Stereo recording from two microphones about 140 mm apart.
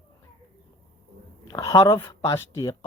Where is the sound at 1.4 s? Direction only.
30° left (ahead or behind).